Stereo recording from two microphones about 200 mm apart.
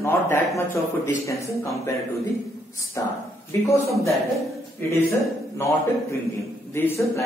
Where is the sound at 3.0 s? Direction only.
15° left (ahead or behind).